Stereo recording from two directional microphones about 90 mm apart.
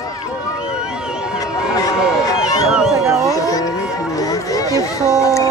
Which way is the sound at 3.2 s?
40° left (ahead or behind).